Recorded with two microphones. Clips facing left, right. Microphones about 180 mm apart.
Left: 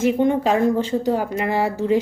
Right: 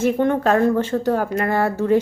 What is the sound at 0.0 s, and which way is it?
A woman's voice, 15° left (ahead or behind).